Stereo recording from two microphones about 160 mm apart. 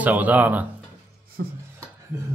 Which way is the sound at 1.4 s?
65° right (ahead or behind).